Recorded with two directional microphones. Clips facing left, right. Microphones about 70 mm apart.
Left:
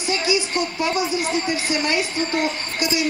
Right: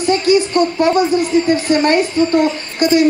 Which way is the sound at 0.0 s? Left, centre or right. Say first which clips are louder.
Right 9 dB; right.